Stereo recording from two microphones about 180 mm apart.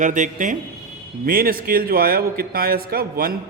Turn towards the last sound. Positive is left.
turn(degrees=-55)  # may be behind; listen again after turning